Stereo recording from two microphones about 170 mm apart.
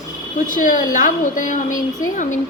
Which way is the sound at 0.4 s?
50° left (ahead or behind).